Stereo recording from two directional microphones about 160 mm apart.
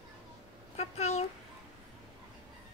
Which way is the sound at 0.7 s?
45° left (ahead or behind).